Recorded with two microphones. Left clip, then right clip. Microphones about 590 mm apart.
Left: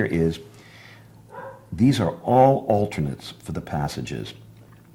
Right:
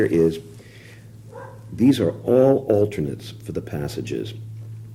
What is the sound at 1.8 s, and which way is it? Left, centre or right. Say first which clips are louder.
Speech: right 3 dB; centre.